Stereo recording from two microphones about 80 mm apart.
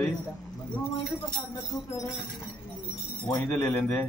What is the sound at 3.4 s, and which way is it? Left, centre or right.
Speech, left.